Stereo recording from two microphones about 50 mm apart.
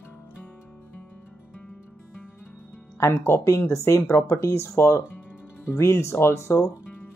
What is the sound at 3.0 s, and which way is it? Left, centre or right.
Speech, left.